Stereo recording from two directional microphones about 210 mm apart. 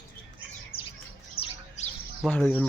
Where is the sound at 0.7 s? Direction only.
25° left (ahead or behind).